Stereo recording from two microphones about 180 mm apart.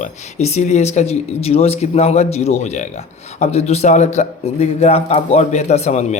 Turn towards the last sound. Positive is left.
turn(degrees=40)  # may be behind; listen again after turning